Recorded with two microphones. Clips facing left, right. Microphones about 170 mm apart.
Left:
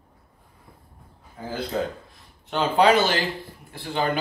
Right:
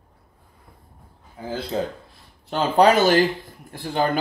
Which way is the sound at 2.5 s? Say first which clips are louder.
Right 2 dB; 40° right (ahead or behind).